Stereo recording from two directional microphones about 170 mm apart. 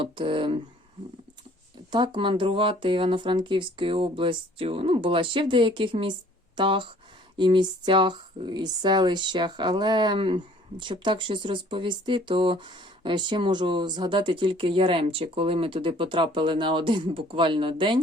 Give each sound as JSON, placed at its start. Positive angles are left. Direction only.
{"t": 0.0, "sound": "speech", "side_deg": -30}
{"t": 1.9, "sound": "speech", "side_deg": -25}